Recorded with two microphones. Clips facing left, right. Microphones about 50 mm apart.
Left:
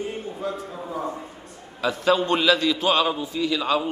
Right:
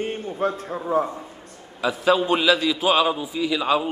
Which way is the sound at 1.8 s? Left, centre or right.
Centre.